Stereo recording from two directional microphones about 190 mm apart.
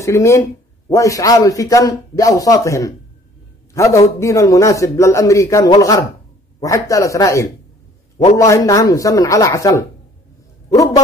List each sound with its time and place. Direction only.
0.0 s a man's voice: 15° left (ahead or behind)